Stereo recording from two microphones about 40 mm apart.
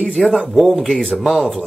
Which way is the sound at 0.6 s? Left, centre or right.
Centre.